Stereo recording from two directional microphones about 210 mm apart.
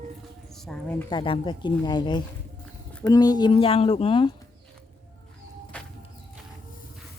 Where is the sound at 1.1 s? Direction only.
25° left (ahead or behind).